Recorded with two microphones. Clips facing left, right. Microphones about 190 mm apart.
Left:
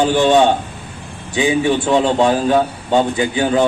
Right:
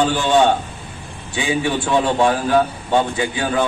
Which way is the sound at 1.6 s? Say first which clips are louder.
Left 4 dB; 20° left (ahead or behind).